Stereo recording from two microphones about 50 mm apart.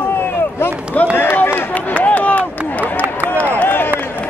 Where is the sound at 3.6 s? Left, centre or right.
Left.